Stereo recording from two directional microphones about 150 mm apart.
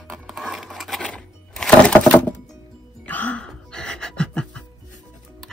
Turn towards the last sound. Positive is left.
turn(degrees=5)  # may be behind; listen again after turning